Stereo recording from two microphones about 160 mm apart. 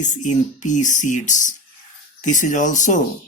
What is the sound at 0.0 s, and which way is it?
Speech, 50° left (ahead or behind).